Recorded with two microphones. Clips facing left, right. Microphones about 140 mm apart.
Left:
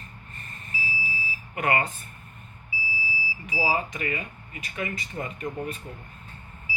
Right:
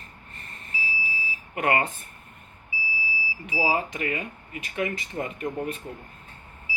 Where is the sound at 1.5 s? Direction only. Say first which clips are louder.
Right 1 dB; 55° right (ahead or behind).